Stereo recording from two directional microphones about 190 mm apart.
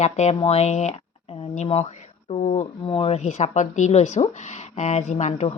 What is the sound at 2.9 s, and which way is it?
Speech, 30° left (ahead or behind).